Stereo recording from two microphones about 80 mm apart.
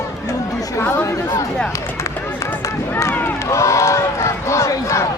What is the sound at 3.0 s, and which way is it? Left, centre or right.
Run, left.